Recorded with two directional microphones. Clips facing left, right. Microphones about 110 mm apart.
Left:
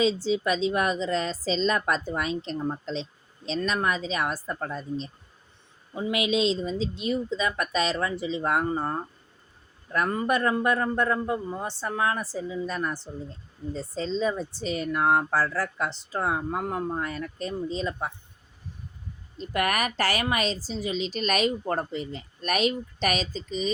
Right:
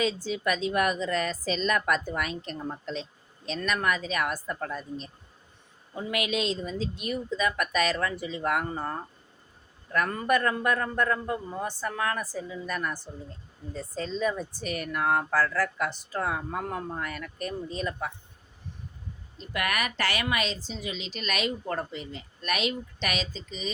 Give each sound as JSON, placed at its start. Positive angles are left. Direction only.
{"t": 0.0, "sound": "a woman's voice", "side_deg": 25}
{"t": 5.9, "sound": "a woman's voice", "side_deg": 20}
{"t": 19.4, "sound": "speech", "side_deg": 40}